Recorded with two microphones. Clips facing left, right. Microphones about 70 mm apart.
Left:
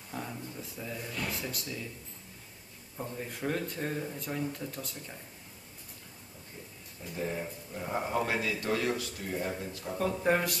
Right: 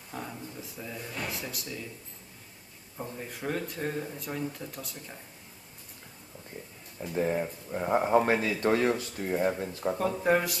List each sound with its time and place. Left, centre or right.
0.1 s speech: centre
3.0 s speech: centre
7.0 s speech: right
9.9 s speech: centre